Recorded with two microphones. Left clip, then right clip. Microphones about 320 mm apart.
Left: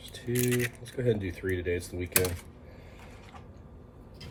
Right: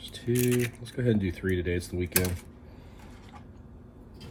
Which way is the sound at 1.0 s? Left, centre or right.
Right.